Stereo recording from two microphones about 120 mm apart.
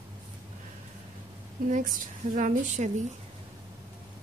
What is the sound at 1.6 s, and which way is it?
A woman's voice, 90° right.